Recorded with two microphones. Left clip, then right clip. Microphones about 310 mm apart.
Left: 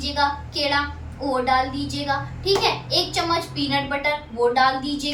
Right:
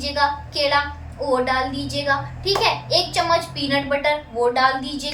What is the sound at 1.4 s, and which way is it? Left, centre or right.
A child's voice, centre.